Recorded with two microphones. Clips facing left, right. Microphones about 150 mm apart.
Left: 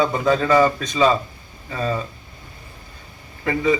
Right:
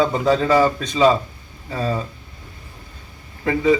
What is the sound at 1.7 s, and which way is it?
Speech, 30° right (ahead or behind).